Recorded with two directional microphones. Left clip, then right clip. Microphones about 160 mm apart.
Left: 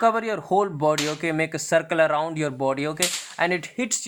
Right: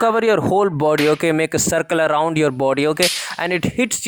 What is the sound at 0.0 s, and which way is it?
Speech, 60° right (ahead or behind).